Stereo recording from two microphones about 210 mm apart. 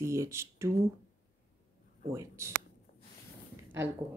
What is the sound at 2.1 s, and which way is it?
Speech, 15° right (ahead or behind).